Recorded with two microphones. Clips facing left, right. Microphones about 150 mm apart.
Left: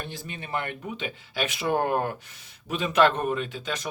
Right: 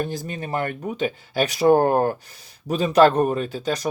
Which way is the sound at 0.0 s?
40° right (ahead or behind).